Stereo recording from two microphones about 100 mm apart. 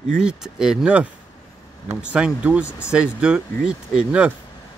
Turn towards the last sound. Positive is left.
turn(degrees=-10)  # may be behind; listen again after turning